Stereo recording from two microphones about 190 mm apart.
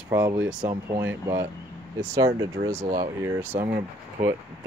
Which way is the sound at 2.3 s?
15° right (ahead or behind).